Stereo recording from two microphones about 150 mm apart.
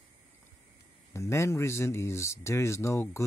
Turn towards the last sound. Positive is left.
turn(degrees=20)  # may be behind; listen again after turning